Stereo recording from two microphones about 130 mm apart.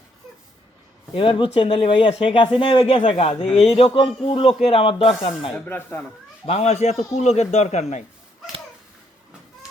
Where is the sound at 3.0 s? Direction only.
55° left (ahead or behind).